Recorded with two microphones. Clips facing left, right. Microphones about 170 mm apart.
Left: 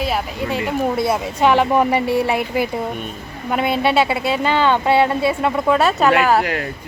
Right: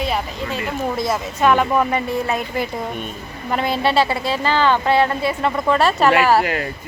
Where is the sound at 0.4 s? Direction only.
15° left (ahead or behind).